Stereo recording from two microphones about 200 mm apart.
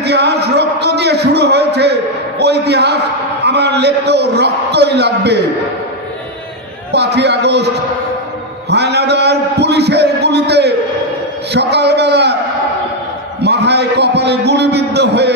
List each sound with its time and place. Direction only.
0.0 s a sound: 55° right (ahead or behind)
3.4 s a man's voice: 55° right (ahead or behind)
6.9 s a man's voice: 55° right (ahead or behind)
8.6 s a man's voice: 55° right (ahead or behind)
13.4 s a man's voice: 55° right (ahead or behind)